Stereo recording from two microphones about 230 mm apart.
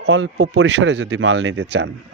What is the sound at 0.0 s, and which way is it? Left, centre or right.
Speech, right.